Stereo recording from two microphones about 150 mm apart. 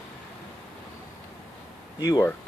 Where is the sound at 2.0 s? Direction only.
25° left (ahead or behind).